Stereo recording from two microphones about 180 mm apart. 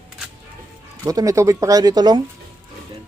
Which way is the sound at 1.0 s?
20° right (ahead or behind).